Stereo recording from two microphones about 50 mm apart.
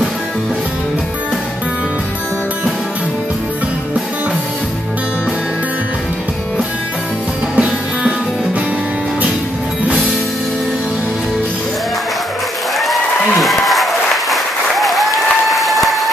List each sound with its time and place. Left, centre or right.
7.5 s music: centre
12.7 s applause: centre